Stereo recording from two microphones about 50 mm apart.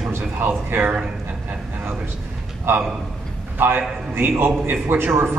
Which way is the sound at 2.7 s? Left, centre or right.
Right.